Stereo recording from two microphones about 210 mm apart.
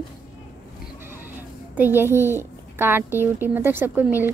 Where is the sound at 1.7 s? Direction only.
10° right (ahead or behind).